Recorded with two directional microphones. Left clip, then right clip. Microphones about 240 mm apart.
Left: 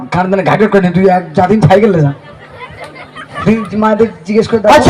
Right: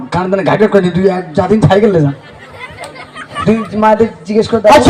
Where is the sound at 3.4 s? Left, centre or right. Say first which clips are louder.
Right 2 dB; left.